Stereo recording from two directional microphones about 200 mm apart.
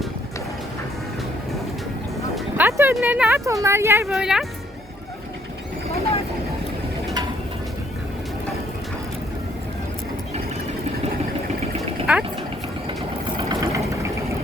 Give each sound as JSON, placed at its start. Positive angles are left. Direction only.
{"t": 2.3, "sound": "music", "side_deg": -10}
{"t": 2.9, "sound": "speech", "side_deg": -5}
{"t": 11.8, "sound": "a sound", "side_deg": -5}
{"t": 13.3, "sound": "engine", "side_deg": -15}